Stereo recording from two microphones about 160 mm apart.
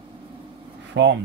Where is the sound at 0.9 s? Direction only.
90° right.